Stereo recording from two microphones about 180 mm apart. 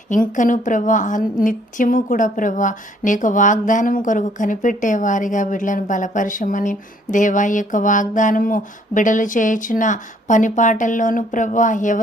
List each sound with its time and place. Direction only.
0.1 s a woman's voice: 45° left (ahead or behind)